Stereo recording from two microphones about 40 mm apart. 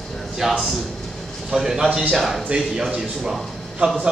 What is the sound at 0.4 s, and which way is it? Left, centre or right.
A man's voice, centre.